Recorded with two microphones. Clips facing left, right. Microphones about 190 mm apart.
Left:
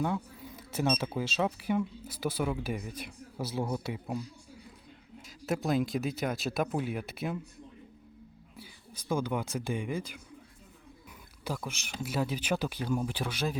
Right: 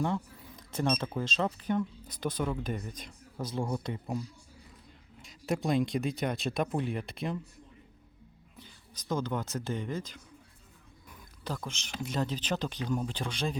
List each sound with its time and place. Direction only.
0.0 s speech: 5° left (ahead or behind)
5.2 s speech: centre (ahead or behind)
8.5 s speech: 10° left (ahead or behind)
11.4 s speech: 10° left (ahead or behind)